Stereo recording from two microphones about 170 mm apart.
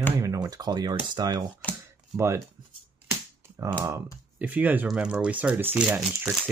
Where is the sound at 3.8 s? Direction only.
20° right (ahead or behind).